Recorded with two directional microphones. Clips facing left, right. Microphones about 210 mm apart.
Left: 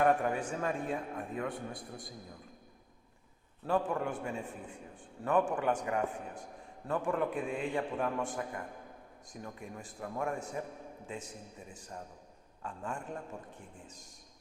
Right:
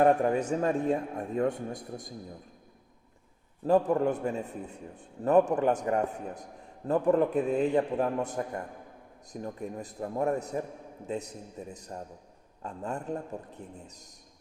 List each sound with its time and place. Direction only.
0.0 s a man's voice: 35° right (ahead or behind)
3.7 s a man's voice: 40° right (ahead or behind)